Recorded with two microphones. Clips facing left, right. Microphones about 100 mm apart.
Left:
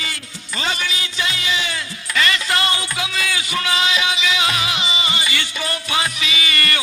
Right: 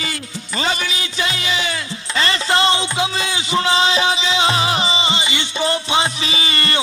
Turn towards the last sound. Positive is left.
turn(degrees=-30)  # may be behind; listen again after turning